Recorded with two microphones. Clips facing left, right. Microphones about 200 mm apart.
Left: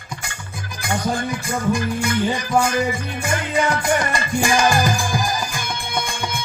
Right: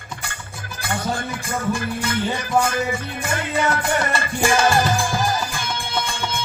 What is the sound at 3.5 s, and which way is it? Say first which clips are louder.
Music: left 2 dB; 15° left (ahead or behind).